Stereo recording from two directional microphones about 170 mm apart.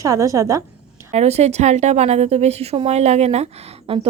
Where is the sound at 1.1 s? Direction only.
40° right (ahead or behind).